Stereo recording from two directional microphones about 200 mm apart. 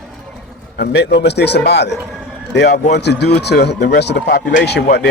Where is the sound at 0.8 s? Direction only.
55° left (ahead or behind).